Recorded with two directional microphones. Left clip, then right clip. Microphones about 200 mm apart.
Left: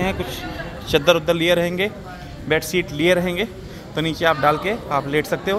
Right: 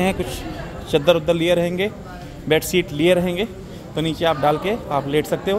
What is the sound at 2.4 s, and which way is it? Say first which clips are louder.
Speech: right 2 dB; 25° right (ahead or behind).